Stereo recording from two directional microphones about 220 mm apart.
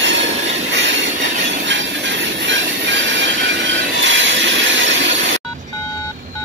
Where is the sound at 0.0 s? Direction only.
55° right (ahead or behind).